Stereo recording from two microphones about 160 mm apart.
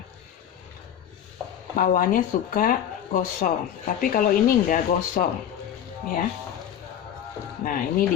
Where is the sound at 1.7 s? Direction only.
60° left (ahead or behind).